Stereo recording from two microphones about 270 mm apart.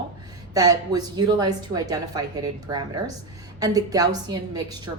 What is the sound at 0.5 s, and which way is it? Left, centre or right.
A woman's voice, centre.